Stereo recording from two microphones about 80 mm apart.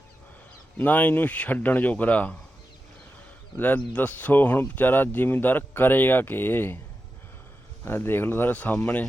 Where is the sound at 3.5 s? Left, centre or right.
Centre.